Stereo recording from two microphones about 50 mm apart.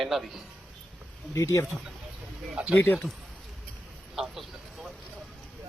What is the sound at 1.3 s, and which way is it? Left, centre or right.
Speech, left.